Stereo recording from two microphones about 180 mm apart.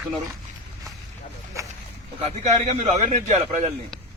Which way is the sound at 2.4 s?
40° right (ahead or behind).